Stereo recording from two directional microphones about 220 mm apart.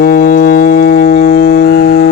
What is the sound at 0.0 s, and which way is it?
Music, 40° left (ahead or behind).